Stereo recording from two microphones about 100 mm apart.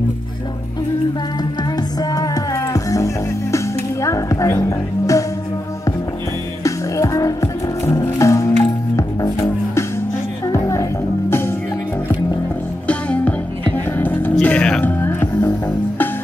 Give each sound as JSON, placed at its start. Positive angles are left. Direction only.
{"t": 1.6, "sound": "music", "side_deg": 40}
{"t": 6.6, "sound": "music", "side_deg": 35}
{"t": 12.8, "sound": "music", "side_deg": 15}